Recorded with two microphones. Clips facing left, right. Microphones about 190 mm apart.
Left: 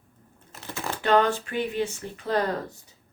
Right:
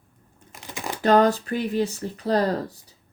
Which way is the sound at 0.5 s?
15° right (ahead or behind).